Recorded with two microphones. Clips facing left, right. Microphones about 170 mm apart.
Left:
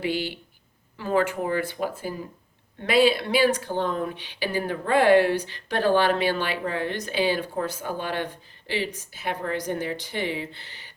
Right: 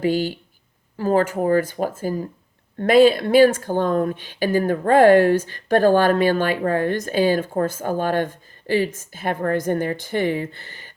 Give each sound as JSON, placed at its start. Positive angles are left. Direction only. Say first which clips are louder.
{"t": 0.0, "sound": "speech", "louder": "right 7 dB", "side_deg": -45}